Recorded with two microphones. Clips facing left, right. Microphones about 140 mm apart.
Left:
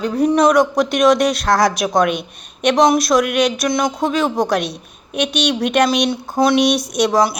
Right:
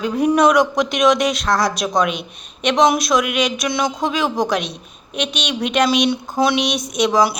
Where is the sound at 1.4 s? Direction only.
70° left (ahead or behind).